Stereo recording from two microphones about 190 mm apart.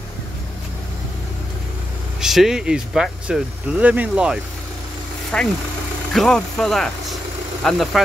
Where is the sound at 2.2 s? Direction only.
Centre (ahead or behind).